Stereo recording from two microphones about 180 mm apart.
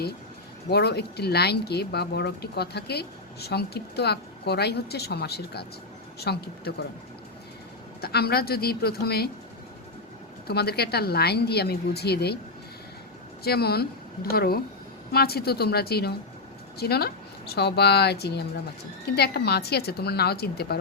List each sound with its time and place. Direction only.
0.7 s speech: 65° left (ahead or behind)
8.0 s speech: 60° left (ahead or behind)
10.4 s speech: 60° left (ahead or behind)
13.4 s speech: 60° left (ahead or behind)